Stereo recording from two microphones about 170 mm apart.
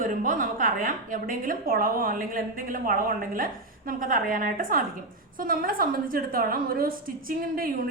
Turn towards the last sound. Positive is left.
turn(degrees=-55)  # may be behind; listen again after turning